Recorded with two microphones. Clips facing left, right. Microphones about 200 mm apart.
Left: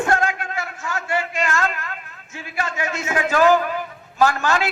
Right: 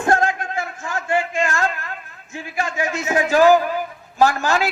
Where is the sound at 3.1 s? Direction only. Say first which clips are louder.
Right 4 dB; 25° right (ahead or behind).